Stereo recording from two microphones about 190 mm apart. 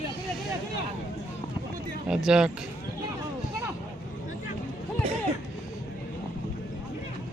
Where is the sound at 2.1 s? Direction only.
5° right (ahead or behind).